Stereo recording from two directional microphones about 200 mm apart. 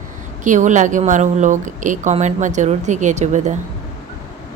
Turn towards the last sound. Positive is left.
turn(degrees=-35)  # may be behind; listen again after turning